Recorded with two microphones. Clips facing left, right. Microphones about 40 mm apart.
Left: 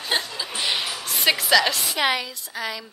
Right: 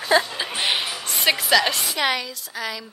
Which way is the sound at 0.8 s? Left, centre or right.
Centre.